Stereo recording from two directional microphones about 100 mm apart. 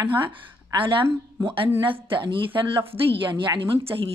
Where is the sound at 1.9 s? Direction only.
60° right (ahead or behind).